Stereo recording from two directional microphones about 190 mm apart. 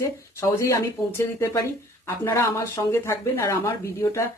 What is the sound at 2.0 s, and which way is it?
Speech, 15° left (ahead or behind).